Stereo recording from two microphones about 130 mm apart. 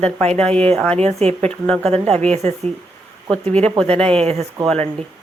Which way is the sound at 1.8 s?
50° right (ahead or behind).